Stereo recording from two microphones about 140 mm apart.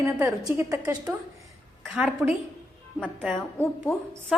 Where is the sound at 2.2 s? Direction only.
10° right (ahead or behind).